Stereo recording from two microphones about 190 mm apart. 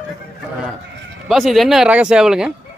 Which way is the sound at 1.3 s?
Centre (ahead or behind).